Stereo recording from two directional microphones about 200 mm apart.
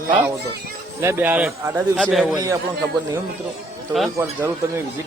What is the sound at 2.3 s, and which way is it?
Speech, 20° right (ahead or behind).